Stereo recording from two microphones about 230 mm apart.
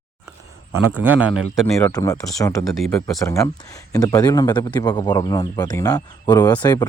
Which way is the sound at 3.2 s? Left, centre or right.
Centre.